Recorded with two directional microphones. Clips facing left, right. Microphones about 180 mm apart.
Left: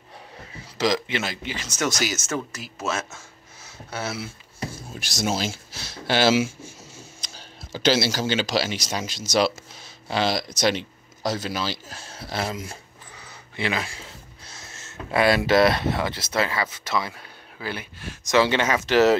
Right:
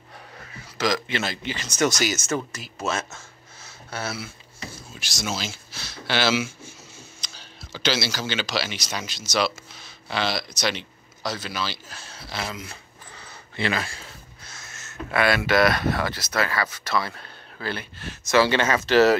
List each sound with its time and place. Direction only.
0.4 s speech: 25° left (ahead or behind); by 3.2 s 5° left (ahead or behind)
3.9 s speech: 20° left (ahead or behind)
4.6 s speech: 55° left (ahead or behind)
13.6 s speech: 15° left (ahead or behind)
14.5 s a sound: 30° left (ahead or behind)
15.1 s speech: 30° left (ahead or behind)